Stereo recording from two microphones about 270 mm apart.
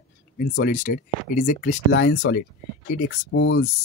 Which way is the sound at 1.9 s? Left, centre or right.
Left.